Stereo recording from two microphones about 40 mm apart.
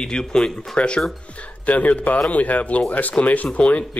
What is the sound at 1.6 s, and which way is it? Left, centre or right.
Speech, left.